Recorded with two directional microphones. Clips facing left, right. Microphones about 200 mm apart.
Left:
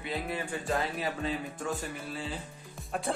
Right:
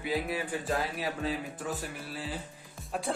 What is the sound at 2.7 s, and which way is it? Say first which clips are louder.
Music: even; centre (ahead or behind).